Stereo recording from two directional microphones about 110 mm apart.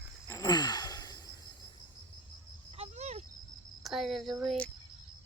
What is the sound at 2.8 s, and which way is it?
Cricket, 80° right.